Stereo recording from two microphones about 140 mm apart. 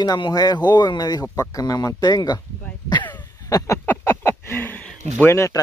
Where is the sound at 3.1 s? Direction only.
25° left (ahead or behind).